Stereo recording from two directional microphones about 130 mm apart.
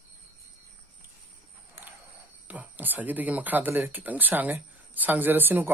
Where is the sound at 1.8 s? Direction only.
15° right (ahead or behind).